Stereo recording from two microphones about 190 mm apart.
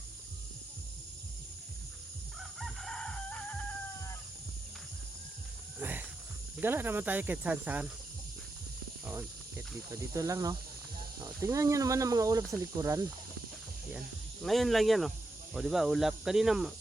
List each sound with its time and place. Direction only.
2.4 s chicken: centre (ahead or behind)
5.8 s a sound: 10° right (ahead or behind)
6.6 s speech: 10° right (ahead or behind)
9.0 s speech: 15° right (ahead or behind)
14.4 s speech: centre (ahead or behind)